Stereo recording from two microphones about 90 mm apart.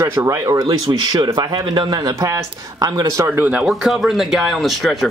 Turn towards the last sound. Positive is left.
turn(degrees=0)  # may be behind; listen again after turning